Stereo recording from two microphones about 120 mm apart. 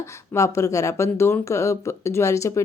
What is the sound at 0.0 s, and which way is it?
Speech, 25° left (ahead or behind).